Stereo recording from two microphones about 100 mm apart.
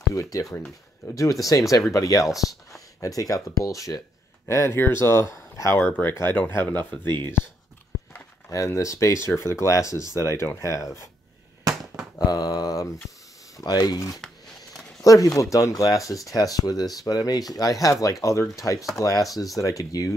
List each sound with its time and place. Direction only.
0.1 s speech: 30° left (ahead or behind)
2.3 s speech: centre (ahead or behind)
3.0 s speech: 35° left (ahead or behind)
5.8 s speech: 20° left (ahead or behind)
8.5 s speech: 30° left (ahead or behind)
12.2 s speech: 40° left (ahead or behind)